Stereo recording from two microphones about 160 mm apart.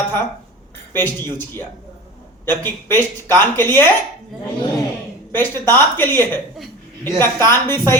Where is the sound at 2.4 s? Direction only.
15° left (ahead or behind).